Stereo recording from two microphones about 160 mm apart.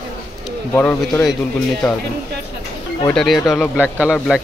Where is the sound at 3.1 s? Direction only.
Centre (ahead or behind).